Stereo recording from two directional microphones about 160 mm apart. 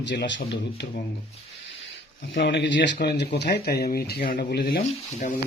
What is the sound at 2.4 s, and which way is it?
Speech, 90° left.